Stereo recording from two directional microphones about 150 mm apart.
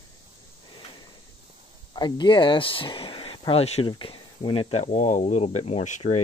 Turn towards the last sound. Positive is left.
turn(degrees=50)  # may be behind; listen again after turning